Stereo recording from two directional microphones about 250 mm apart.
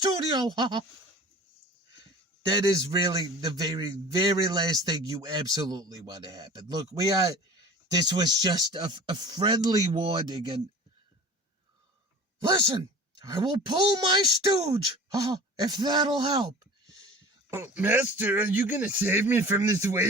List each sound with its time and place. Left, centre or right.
0.0 s a man's voice: centre
2.5 s a man's voice: centre
12.4 s a man's voice: centre
17.5 s a man's voice: centre